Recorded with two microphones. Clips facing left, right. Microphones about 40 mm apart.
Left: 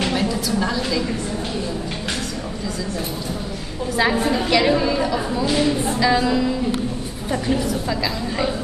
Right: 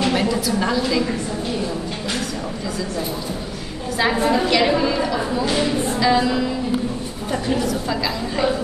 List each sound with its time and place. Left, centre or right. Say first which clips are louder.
0.1 s a sound: right 2 dB; centre
4.2 s a woman's voice: right 2 dB; centre
4.5 s a woman's voice: even; centre
7.9 s a woman's voice: right 1 dB; centre